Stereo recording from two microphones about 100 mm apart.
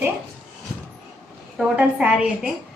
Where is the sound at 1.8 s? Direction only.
10° right (ahead or behind).